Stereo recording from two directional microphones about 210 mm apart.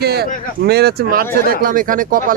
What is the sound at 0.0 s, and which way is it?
A man's voice, 50° right (ahead or behind).